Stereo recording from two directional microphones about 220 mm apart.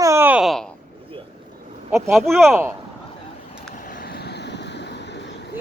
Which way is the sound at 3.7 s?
40° left (ahead or behind).